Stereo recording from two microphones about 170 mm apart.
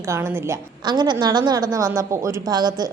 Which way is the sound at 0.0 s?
15° right (ahead or behind).